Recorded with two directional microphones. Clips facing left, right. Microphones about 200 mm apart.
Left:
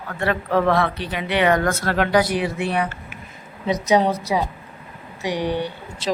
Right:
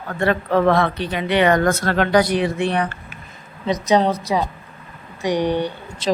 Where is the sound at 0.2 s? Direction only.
5° left (ahead or behind).